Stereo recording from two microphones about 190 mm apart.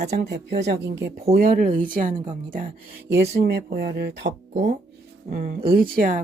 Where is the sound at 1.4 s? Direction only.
45° right (ahead or behind).